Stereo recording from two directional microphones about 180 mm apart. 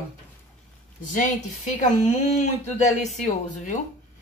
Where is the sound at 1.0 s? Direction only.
45° left (ahead or behind).